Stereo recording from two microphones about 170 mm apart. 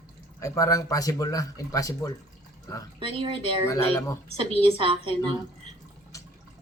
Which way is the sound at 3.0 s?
30° right (ahead or behind).